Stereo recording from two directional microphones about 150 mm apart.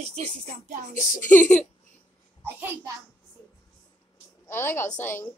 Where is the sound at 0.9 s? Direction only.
10° left (ahead or behind).